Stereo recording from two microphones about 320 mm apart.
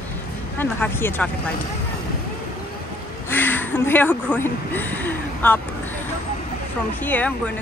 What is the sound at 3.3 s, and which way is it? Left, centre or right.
Speech, centre.